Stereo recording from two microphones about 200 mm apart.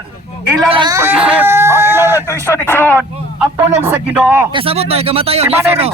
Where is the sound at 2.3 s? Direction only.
10° left (ahead or behind).